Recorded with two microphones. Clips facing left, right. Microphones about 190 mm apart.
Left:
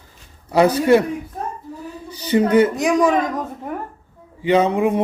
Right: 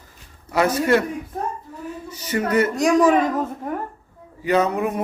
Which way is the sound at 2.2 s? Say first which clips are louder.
Left 6 dB; 30° left (ahead or behind).